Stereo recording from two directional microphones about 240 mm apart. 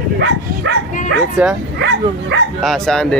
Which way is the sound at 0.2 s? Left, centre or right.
Right.